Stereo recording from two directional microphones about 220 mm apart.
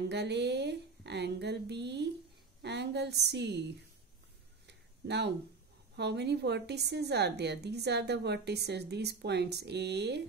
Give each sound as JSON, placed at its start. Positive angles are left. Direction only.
{"t": 0.1, "sound": "a woman's voice", "side_deg": -50}
{"t": 4.6, "sound": "a sound", "side_deg": -50}
{"t": 5.9, "sound": "a woman's voice", "side_deg": -50}